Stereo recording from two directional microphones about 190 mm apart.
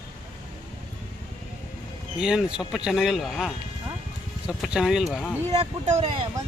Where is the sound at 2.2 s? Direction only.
5° right (ahead or behind).